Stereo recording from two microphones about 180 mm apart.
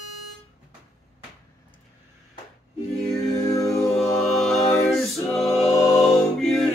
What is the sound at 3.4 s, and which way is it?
Music, 15° left (ahead or behind).